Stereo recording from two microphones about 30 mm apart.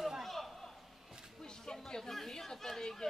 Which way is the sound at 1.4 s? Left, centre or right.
Left.